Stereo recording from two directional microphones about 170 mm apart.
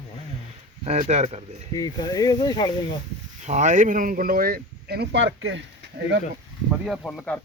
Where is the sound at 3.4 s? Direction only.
45° right (ahead or behind); by 5.6 s 90° right.